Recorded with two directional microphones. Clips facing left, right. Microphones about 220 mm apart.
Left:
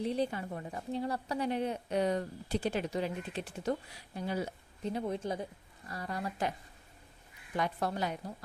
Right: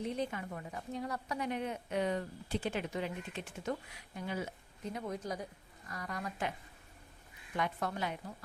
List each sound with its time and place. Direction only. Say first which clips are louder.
0.0 s a woman's voice: left 4 dB; 30° left (ahead or behind)
7.5 s a woman's voice: left 3 dB; 35° left (ahead or behind)